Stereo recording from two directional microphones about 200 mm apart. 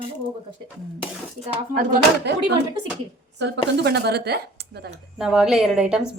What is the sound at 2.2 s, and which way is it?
A woman's voice, 60° right (ahead or behind).